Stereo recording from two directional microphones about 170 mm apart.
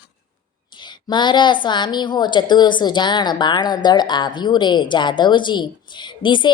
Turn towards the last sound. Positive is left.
turn(degrees=30)  # may be behind; listen again after turning